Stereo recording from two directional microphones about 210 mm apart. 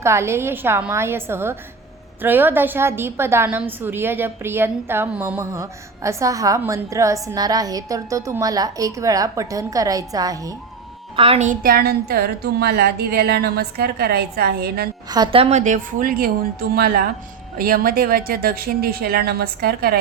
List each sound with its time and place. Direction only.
0.0 s a woman's voice: 10° right (ahead or behind)
11.2 s a woman's voice: 30° right (ahead or behind); by 14.8 s 50° right (ahead or behind)
15.1 s a woman's voice: 25° right (ahead or behind); by 20.0 s 50° right (ahead or behind)